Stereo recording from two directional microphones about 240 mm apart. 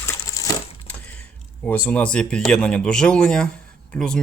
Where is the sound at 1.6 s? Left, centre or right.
Centre.